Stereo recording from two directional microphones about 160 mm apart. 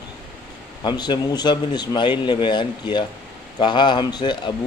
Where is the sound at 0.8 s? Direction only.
25° left (ahead or behind).